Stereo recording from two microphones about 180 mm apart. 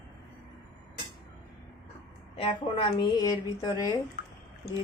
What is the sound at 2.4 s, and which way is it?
A woman's voice, 30° left (ahead or behind).